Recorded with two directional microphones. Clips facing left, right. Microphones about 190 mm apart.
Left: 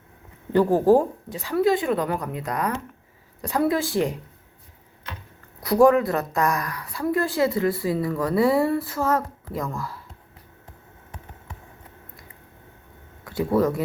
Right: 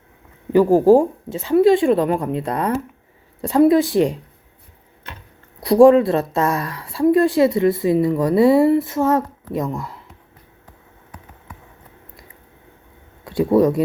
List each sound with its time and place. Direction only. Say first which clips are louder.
0.5 s speech: right 5 dB; 15° right (ahead or behind)
5.5 s speech: right 6 dB; 25° right (ahead or behind)
13.2 s speech: right 6 dB; 25° right (ahead or behind)